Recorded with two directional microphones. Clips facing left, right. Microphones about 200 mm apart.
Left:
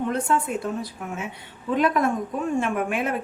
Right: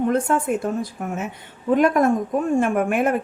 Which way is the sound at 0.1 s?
50° right (ahead or behind).